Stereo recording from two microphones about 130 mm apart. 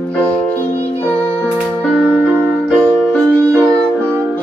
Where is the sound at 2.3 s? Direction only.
15° right (ahead or behind).